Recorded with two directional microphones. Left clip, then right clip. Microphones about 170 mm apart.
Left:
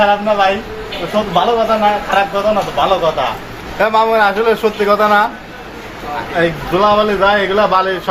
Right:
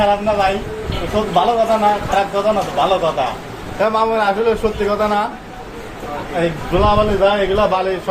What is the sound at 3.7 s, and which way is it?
A man's voice, 20° left (ahead or behind).